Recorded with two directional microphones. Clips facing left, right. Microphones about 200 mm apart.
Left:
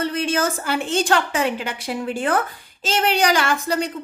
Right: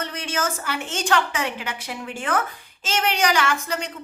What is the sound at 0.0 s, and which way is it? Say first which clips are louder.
A woman's voice: left 6 dB; 35° left (ahead or behind).